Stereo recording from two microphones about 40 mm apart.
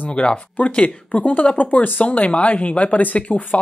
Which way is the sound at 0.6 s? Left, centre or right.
Left.